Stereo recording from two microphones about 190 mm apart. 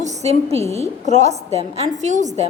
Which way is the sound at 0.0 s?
35° right (ahead or behind).